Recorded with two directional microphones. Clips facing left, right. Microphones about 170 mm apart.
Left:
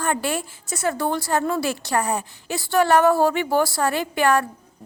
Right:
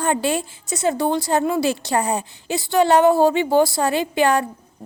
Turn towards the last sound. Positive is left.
turn(degrees=-20)  # may be behind; listen again after turning